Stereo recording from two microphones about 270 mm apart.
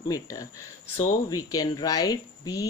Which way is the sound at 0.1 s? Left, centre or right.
Centre.